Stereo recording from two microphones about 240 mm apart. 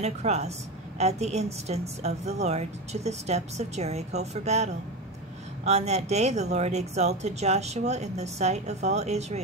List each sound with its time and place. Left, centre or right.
0.0 s speech: right
5.7 s speech: right